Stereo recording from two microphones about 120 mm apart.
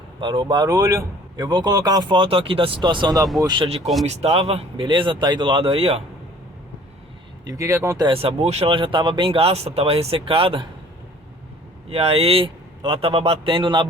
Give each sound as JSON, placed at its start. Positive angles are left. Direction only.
{"t": 0.2, "sound": "speech", "side_deg": -40}
{"t": 4.0, "sound": "speech", "side_deg": -60}
{"t": 7.4, "sound": "speech", "side_deg": -25}
{"t": 8.1, "sound": "speech", "side_deg": -50}
{"t": 8.7, "sound": "speech", "side_deg": -45}
{"t": 11.9, "sound": "speech", "side_deg": -55}